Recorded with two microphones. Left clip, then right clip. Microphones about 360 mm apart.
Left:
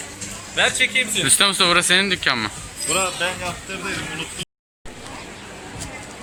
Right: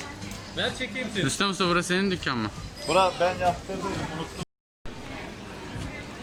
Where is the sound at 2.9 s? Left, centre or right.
Right.